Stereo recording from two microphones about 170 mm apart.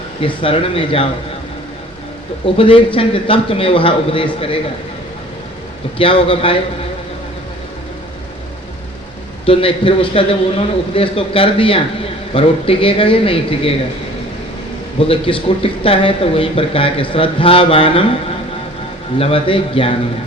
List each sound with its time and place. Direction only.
0.2 s a man's voice: 35° left (ahead or behind)
2.6 s a man's voice: 30° left (ahead or behind)
6.0 s a man's voice: 30° left (ahead or behind)
9.5 s a man's voice: 30° left (ahead or behind)
15.0 s a man's voice: 30° left (ahead or behind)
19.2 s a man's voice: 35° left (ahead or behind)